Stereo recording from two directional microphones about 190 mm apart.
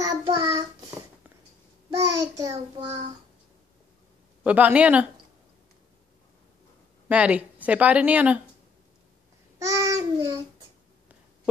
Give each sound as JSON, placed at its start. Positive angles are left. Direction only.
{"t": 0.0, "sound": "child singing", "side_deg": -20}
{"t": 2.0, "sound": "child singing", "side_deg": -15}
{"t": 4.4, "sound": "a woman's voice", "side_deg": -10}
{"t": 7.1, "sound": "a woman's voice", "side_deg": -5}
{"t": 9.6, "sound": "child singing", "side_deg": -15}